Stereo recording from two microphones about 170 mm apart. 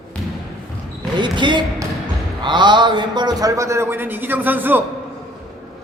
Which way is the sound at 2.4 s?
25° right (ahead or behind).